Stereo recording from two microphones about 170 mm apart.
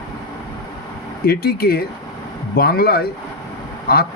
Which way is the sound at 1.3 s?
65° left (ahead or behind).